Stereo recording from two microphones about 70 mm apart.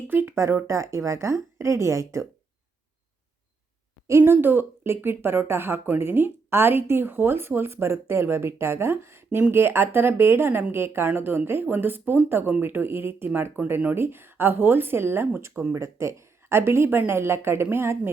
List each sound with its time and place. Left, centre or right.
0.1 s speech: right
0.7 s a woman's voice: right
4.2 s speech: right